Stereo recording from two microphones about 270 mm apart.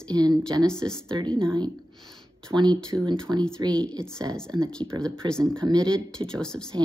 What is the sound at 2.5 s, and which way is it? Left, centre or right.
Speech, centre.